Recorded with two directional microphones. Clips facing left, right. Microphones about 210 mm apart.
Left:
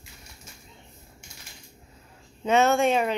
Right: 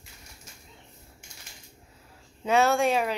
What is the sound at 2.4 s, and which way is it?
Speech, centre (ahead or behind).